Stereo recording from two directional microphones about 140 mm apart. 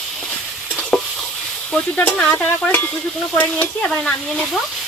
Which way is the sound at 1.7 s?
10° left (ahead or behind).